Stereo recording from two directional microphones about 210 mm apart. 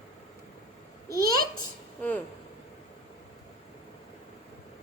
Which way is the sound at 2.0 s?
10° left (ahead or behind).